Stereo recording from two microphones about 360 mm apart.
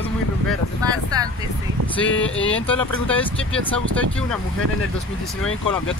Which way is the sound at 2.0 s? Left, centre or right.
Left.